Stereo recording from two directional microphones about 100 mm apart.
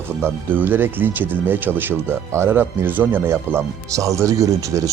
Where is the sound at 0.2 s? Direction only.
20° right (ahead or behind).